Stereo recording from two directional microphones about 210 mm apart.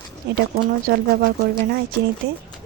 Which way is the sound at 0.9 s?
50° right (ahead or behind).